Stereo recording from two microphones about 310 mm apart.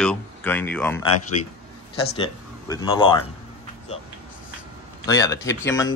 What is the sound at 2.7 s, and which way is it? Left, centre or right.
Speech, centre.